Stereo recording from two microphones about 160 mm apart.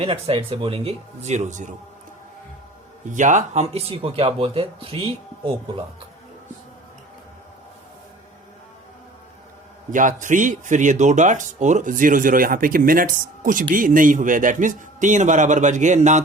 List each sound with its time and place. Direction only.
0.0 s speech: 35° right (ahead or behind)
3.1 s speech: 50° right (ahead or behind); by 5.8 s 35° right (ahead or behind)
9.9 s a man's voice: 55° right (ahead or behind)